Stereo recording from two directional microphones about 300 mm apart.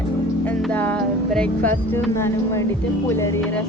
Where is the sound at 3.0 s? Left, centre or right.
Centre.